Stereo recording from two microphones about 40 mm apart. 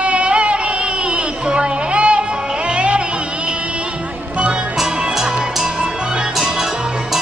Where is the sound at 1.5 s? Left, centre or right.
Right.